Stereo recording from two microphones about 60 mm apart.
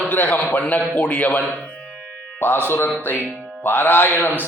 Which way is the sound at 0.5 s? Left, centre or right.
Left.